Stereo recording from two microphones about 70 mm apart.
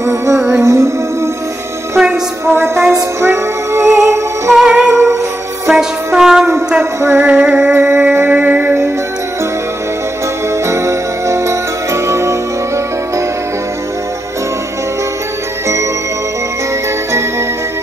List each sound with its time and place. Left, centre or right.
0.0 s music: right
2.4 s music: right
4.6 s music: centre
4.9 s music: right
5.7 s music: centre
6.8 s music: right
7.2 s music: centre
7.7 s music: right
8.3 s a sound: right
10.7 s music: right